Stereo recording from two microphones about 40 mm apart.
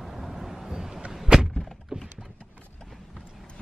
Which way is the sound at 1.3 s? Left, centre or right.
Centre.